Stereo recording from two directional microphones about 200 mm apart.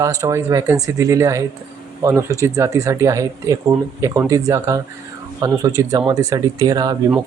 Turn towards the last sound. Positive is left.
turn(degrees=-20)  # may be behind; listen again after turning